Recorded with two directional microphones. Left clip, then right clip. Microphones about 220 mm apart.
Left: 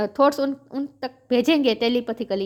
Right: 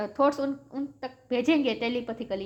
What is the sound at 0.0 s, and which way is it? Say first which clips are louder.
A woman's voice: left 6 dB; 45° left (ahead or behind).